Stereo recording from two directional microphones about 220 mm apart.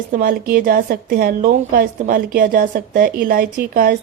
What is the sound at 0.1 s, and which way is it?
A woman's voice, 40° right (ahead or behind).